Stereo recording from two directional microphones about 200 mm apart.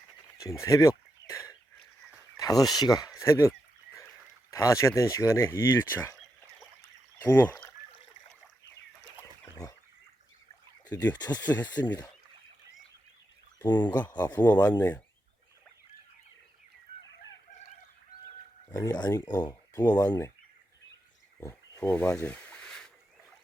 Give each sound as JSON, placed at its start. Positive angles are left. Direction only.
{"t": 0.3, "sound": "a sound", "side_deg": 15}
{"t": 2.4, "sound": "speech", "side_deg": 20}
{"t": 4.5, "sound": "speech", "side_deg": 15}
{"t": 7.2, "sound": "speech", "side_deg": 10}
{"t": 9.4, "sound": "fowl", "side_deg": 15}
{"t": 10.8, "sound": "speech", "side_deg": 20}
{"t": 13.7, "sound": "speech", "side_deg": 20}
{"t": 14.3, "sound": "speech", "side_deg": 10}
{"t": 18.7, "sound": "speech", "side_deg": 20}
{"t": 21.4, "sound": "wild animals", "side_deg": 15}